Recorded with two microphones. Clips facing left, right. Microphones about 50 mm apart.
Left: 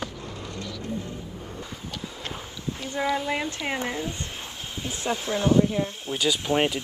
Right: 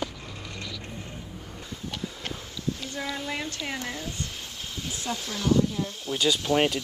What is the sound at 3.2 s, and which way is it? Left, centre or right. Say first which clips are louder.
Speech: left 4 dB; centre.